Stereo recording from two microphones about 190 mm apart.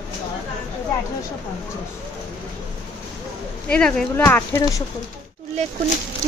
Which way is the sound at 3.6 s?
5° left (ahead or behind).